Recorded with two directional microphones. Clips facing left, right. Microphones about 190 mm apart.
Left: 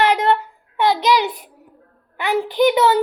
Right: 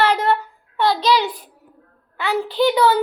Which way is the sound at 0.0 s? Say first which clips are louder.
Left 1 dB; 20° left (ahead or behind).